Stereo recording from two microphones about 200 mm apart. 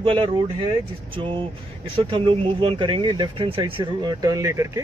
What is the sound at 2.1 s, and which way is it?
Speech, 25° right (ahead or behind).